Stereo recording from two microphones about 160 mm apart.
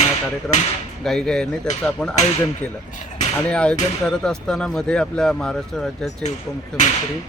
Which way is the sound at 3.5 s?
5° left (ahead or behind).